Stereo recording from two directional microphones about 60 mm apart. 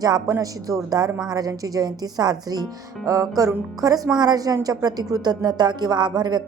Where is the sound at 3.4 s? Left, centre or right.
Right.